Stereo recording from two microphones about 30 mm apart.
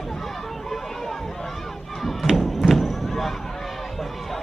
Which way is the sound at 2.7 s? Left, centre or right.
Centre.